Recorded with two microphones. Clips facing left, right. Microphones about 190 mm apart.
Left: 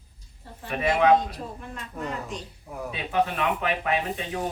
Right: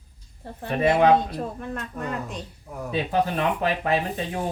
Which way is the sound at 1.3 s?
55° right (ahead or behind).